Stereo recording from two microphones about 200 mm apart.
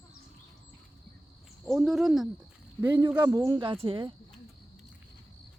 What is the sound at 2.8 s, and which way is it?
Speech, 20° right (ahead or behind).